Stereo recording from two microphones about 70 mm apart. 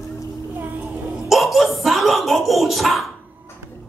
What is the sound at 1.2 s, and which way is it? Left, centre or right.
Speech, centre.